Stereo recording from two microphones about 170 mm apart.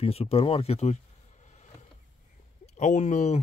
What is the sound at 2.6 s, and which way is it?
Speech, 45° left (ahead or behind).